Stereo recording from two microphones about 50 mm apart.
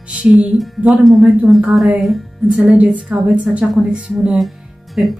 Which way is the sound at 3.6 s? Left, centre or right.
Centre.